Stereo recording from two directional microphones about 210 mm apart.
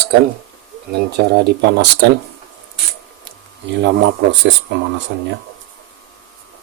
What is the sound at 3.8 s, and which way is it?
Speech, 55° right (ahead or behind).